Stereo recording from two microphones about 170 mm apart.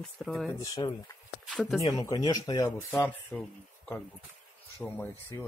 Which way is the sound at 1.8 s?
20° left (ahead or behind).